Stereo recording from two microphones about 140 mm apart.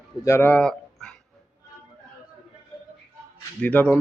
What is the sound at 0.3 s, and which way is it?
Speech, 15° left (ahead or behind).